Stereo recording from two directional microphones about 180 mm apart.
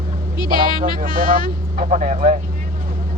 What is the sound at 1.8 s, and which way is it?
Speech, 45° right (ahead or behind).